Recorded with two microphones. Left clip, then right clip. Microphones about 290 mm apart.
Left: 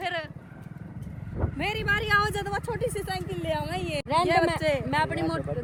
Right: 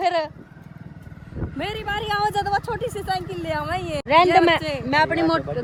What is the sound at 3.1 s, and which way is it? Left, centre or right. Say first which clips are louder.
Speech: right 5 dB; centre.